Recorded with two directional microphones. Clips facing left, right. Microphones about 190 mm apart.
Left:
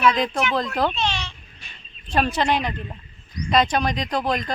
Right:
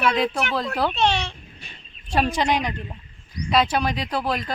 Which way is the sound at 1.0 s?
60° right (ahead or behind).